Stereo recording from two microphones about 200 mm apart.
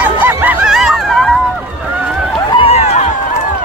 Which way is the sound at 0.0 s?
10° right (ahead or behind).